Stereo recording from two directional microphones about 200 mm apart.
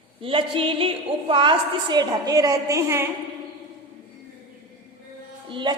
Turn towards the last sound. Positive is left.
turn(degrees=-20)  # may be behind; listen again after turning